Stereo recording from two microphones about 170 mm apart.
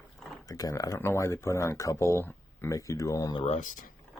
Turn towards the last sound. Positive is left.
turn(degrees=50)  # may be behind; listen again after turning